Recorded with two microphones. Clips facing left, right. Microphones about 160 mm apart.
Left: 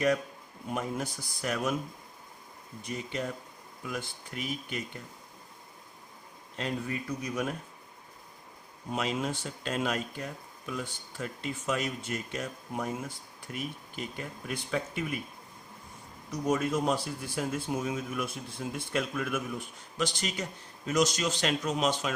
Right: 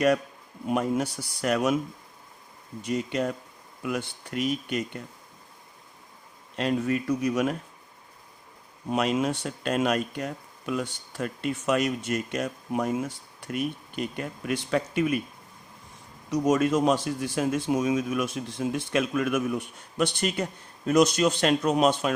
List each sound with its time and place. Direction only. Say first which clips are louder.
0.7 s speech: right 8 dB; 70° right (ahead or behind)
2.8 s speech: right 8 dB; 70° right (ahead or behind)
6.6 s speech: right 8 dB; 75° right (ahead or behind)
8.9 s speech: right 7 dB; 75° right (ahead or behind)
16.3 s speech: right 6 dB; 90° right; by 22.1 s 60° right (ahead or behind)